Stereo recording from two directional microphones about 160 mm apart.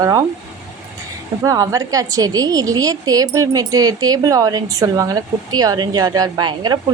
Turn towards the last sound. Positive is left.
turn(degrees=-25)  # may be behind; listen again after turning